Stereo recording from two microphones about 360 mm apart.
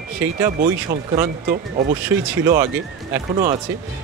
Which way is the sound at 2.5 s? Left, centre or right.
Centre.